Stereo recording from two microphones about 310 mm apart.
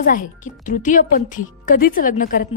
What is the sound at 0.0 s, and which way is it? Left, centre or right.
A woman's voice, left.